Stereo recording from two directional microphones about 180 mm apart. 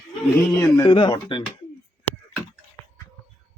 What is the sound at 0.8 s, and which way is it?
Speech, 25° left (ahead or behind).